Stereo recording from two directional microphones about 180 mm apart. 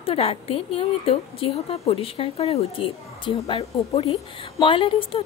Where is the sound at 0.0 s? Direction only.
30° left (ahead or behind).